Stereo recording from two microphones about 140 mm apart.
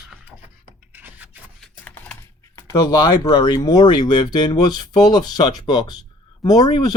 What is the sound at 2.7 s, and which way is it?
Speech, 25° left (ahead or behind).